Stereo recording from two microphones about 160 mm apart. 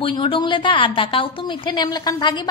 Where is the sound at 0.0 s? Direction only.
30° left (ahead or behind).